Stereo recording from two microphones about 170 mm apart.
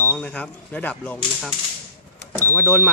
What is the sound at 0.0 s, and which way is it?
Speech, 10° left (ahead or behind).